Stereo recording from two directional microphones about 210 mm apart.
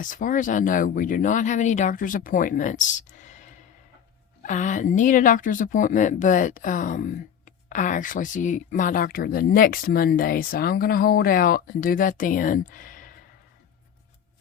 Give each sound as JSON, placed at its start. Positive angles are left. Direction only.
{"t": 0.0, "sound": "speech", "side_deg": 40}